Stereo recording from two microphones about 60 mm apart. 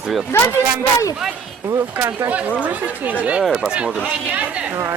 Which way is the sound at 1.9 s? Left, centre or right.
Right.